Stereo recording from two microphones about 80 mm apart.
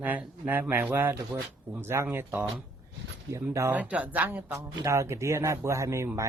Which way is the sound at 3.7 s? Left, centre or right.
Centre.